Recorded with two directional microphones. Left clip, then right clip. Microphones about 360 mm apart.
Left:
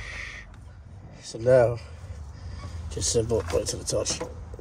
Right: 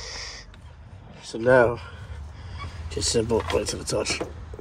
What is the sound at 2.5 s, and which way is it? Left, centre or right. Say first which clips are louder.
Fowl: right 5 dB; centre.